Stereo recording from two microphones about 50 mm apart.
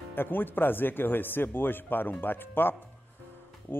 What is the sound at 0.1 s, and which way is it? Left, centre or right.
Speech, left.